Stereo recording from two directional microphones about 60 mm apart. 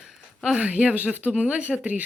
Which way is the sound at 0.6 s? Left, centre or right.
Right.